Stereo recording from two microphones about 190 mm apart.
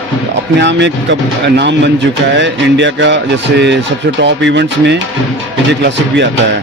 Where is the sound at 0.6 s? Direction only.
70° right (ahead or behind).